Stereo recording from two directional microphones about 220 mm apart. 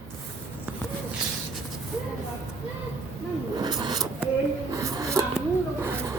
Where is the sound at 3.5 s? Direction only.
20° right (ahead or behind).